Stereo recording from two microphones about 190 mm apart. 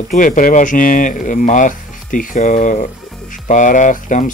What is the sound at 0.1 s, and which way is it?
Speech, 45° left (ahead or behind).